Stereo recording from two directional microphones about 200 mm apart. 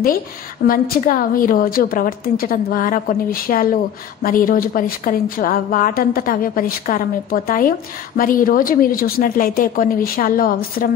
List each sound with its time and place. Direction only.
0.7 s a woman's voice: 45° left (ahead or behind)